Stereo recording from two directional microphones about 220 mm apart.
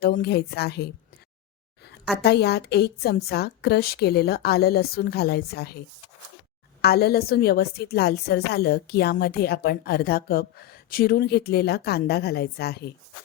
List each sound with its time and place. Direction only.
0.0 s a woman's voice: 45° left (ahead or behind)
2.2 s a woman's voice: 45° left (ahead or behind)
6.8 s a woman's voice: 45° left (ahead or behind)